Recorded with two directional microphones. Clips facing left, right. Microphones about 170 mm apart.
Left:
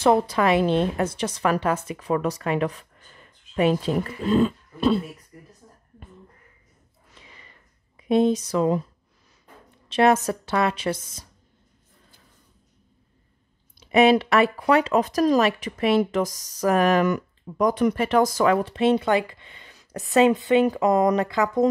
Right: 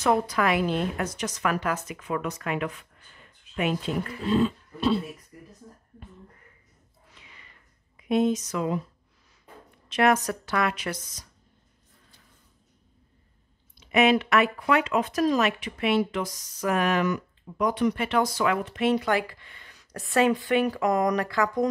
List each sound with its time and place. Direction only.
0.0 s speech: 30° left (ahead or behind)
4.3 s speech: 50° left (ahead or behind)
7.2 s a sound: 35° left (ahead or behind)
8.0 s speech: 30° left (ahead or behind)
9.8 s speech: 30° left (ahead or behind)
13.7 s speech: 35° left (ahead or behind)